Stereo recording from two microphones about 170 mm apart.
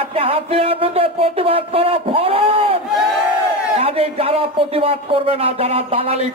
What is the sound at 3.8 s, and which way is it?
Speech, 35° right (ahead or behind).